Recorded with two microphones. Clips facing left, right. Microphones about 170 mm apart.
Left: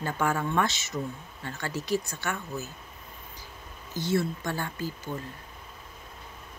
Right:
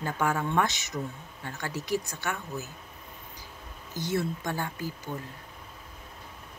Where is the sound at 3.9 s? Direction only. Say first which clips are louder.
Left 2 dB; 15° right (ahead or behind).